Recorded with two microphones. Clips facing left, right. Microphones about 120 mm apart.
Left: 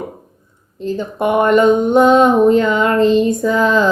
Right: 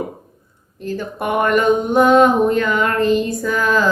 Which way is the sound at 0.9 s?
20° left (ahead or behind).